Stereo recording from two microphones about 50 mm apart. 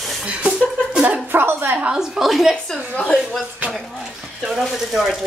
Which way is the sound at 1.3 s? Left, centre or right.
Right.